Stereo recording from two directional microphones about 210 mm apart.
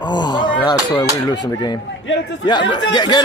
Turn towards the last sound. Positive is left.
turn(degrees=20)  # may be behind; listen again after turning